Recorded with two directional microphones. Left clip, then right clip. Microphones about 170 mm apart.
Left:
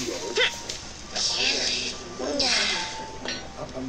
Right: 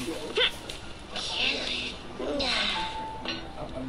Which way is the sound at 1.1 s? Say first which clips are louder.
Left 4 dB; 5° right (ahead or behind).